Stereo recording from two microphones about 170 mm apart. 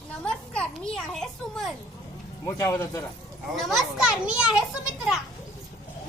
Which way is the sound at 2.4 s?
20° left (ahead or behind).